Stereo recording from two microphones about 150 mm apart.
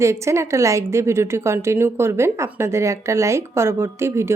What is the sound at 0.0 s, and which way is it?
A woman's voice, 20° right (ahead or behind).